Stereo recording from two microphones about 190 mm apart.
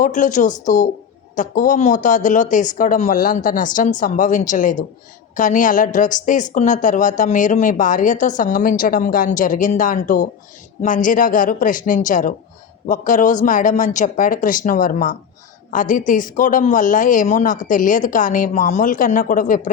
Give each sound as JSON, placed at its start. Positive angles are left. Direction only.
{"t": 0.0, "sound": "a woman's voice", "side_deg": 40}